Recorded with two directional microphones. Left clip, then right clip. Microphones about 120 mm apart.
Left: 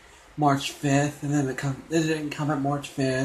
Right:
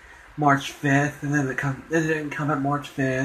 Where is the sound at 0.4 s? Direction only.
20° left (ahead or behind).